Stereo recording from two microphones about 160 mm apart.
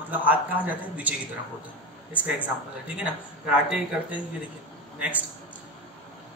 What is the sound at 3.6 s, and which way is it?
A man's voice, 5° right (ahead or behind).